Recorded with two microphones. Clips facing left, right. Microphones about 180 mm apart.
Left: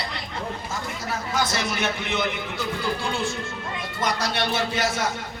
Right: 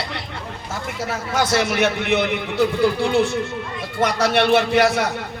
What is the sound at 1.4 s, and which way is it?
A man's voice, 65° right (ahead or behind).